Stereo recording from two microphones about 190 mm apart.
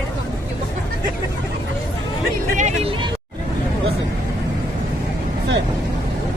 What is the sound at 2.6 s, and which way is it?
Vehicle, 40° right (ahead or behind).